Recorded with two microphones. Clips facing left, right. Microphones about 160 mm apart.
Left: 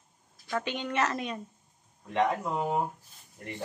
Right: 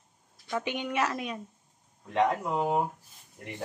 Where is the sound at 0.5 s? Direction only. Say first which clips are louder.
Even; 10° right (ahead or behind).